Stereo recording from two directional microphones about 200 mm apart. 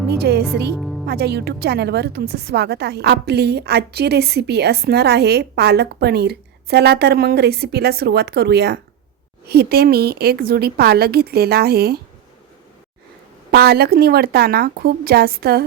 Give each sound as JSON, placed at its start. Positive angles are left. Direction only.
{"t": 0.2, "sound": "a woman's voice", "side_deg": -55}
{"t": 0.8, "sound": "music", "side_deg": 0}
{"t": 1.0, "sound": "a woman's voice", "side_deg": -55}
{"t": 13.5, "sound": "a woman's voice", "side_deg": -50}